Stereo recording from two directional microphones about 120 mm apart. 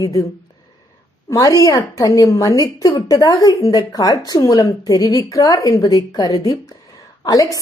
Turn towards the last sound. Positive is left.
turn(degrees=30)  # may be behind; listen again after turning